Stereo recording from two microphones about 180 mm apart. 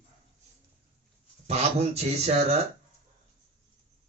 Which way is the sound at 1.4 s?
35° right (ahead or behind).